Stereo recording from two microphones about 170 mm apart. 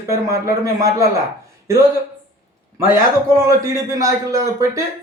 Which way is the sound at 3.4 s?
20° right (ahead or behind).